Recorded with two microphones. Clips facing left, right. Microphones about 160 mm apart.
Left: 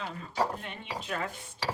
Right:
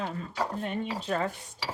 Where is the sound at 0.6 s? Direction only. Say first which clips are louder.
Right 7 dB; 40° right (ahead or behind).